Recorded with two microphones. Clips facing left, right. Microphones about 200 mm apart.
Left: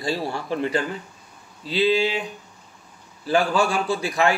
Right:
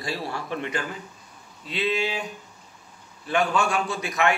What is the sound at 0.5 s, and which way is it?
Speech, 30° left (ahead or behind).